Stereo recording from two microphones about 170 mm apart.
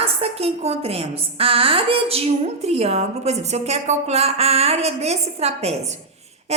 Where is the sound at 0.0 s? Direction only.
35° right (ahead or behind).